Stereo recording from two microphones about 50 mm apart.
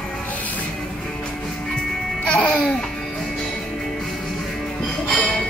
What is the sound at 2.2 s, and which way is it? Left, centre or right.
Music, centre.